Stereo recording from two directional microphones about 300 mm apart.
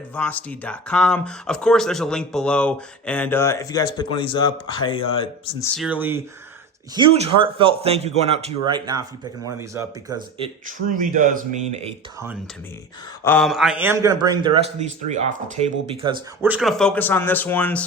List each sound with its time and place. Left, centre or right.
0.1 s speech: centre
5.7 s speech: centre
6.9 s speech: centre
13.2 s a man's voice: centre
16.4 s speech: centre